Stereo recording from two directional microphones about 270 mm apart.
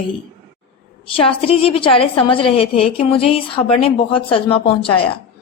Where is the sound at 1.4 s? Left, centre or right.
Left.